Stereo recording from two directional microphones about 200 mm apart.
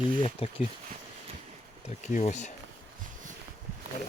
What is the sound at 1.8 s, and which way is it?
Speech, 35° left (ahead or behind).